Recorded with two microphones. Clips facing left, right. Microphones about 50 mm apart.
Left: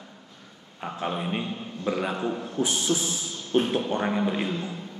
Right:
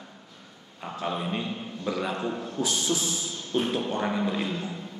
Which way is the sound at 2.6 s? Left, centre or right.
Left.